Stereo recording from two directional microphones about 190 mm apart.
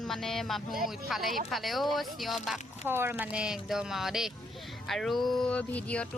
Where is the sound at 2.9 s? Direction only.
10° right (ahead or behind); by 6.0 s 5° left (ahead or behind).